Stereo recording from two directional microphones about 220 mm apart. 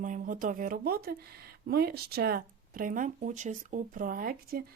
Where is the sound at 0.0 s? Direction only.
35° right (ahead or behind).